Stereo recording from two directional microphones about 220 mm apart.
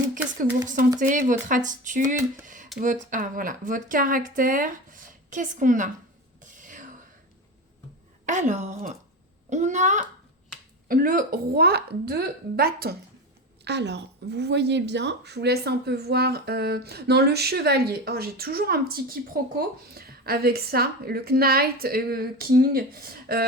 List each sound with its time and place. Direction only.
0.9 s speech: 35° right (ahead or behind)
6.4 s a sound: 35° right (ahead or behind)
8.3 s speech: 35° right (ahead or behind)